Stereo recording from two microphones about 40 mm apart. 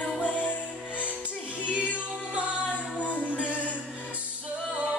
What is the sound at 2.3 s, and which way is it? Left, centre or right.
Music, right.